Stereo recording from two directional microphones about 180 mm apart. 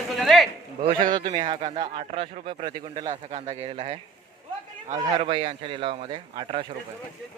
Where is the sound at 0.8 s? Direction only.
30° right (ahead or behind).